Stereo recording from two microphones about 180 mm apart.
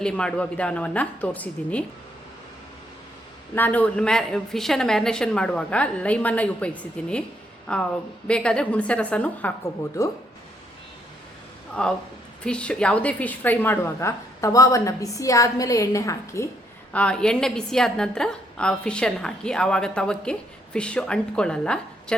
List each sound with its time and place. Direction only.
0.0 s a woman's voice: 5° left (ahead or behind)
3.5 s a woman's voice: 10° left (ahead or behind)
11.7 s a woman's voice: 5° left (ahead or behind)
16.9 s speech: 5° left (ahead or behind)